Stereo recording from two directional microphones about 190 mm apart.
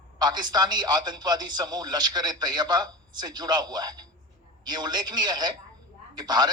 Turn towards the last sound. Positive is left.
turn(degrees=-20)  # may be behind; listen again after turning